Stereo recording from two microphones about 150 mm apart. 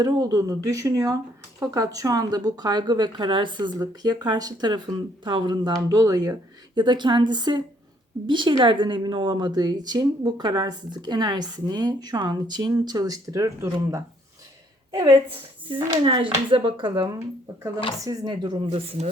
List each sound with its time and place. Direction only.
0.0 s a woman's voice: 25° right (ahead or behind)
18.7 s speech: 45° right (ahead or behind)